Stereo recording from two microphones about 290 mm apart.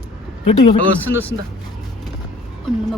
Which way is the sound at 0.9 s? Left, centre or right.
Centre.